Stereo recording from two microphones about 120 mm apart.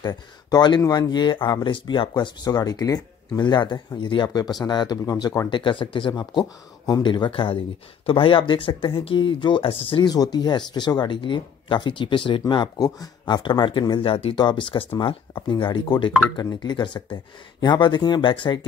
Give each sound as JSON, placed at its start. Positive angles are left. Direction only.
{"t": 0.0, "sound": "speech", "side_deg": 35}
{"t": 5.5, "sound": "speech", "side_deg": 45}